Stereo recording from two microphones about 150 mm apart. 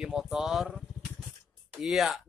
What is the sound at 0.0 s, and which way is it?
Speech, 5° right (ahead or behind).